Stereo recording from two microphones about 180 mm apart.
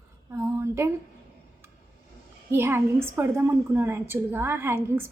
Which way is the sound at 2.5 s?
15° right (ahead or behind).